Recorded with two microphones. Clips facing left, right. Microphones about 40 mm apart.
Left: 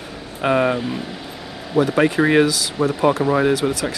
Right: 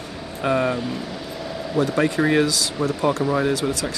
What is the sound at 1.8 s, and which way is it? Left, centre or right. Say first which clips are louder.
Speech: left 4 dB; left.